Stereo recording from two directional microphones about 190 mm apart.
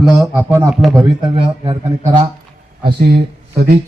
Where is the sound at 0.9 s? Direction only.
25° right (ahead or behind).